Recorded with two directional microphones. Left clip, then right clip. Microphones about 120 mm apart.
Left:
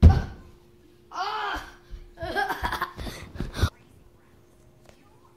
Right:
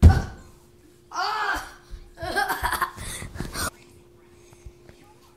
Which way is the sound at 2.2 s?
5° left (ahead or behind).